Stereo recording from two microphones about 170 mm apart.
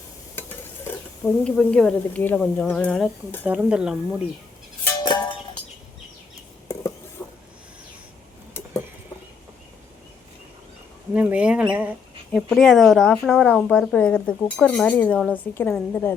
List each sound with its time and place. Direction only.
1.2 s speech: 5° left (ahead or behind)
3.4 s speech: 10° right (ahead or behind)
5.0 s music: 25° left (ahead or behind)
11.1 s a woman's voice: 10° right (ahead or behind); by 16.1 s 10° left (ahead or behind)